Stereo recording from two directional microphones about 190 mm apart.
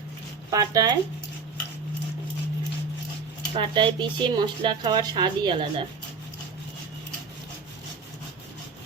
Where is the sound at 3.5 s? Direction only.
25° right (ahead or behind).